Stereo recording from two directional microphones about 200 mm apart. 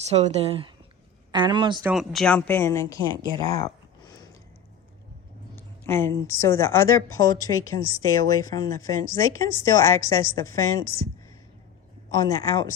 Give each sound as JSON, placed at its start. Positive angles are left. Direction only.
{"t": 0.1, "sound": "a man's voice", "side_deg": -30}
{"t": 1.9, "sound": "a woman's voice", "side_deg": 0}
{"t": 5.5, "sound": "a woman's voice", "side_deg": 10}
{"t": 12.2, "sound": "speech", "side_deg": 20}